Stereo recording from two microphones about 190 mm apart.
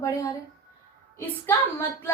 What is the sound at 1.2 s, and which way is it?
Speech, 10° left (ahead or behind).